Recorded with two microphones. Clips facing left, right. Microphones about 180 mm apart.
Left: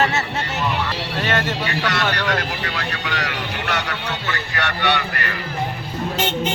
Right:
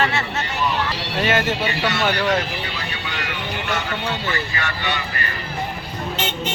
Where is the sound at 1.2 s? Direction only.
10° right (ahead or behind).